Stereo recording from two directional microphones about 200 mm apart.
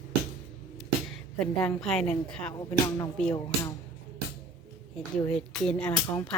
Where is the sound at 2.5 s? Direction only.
20° left (ahead or behind).